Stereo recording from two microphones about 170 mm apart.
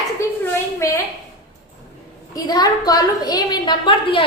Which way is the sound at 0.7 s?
15° left (ahead or behind).